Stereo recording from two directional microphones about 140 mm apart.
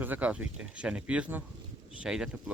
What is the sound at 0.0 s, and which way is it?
Speech, 10° right (ahead or behind).